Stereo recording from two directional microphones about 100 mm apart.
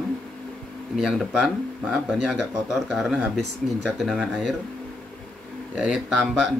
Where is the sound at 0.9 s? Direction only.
5° right (ahead or behind).